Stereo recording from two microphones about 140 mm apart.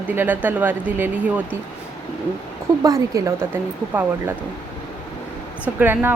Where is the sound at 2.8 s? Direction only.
25° right (ahead or behind).